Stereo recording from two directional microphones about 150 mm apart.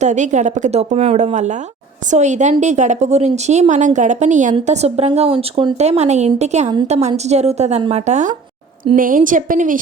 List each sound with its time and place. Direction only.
0.0 s a woman's voice: 50° right (ahead or behind)
9.0 s a woman's voice: 65° right (ahead or behind)